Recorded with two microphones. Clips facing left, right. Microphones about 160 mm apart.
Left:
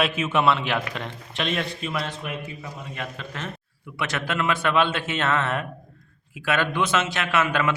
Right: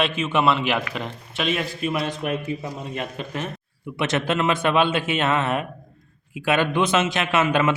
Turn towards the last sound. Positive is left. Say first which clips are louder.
# right 3 dB
turn(degrees=-20)  # may be behind; listen again after turning